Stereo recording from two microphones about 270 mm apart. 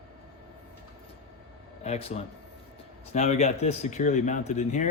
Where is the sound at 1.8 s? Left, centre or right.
Left.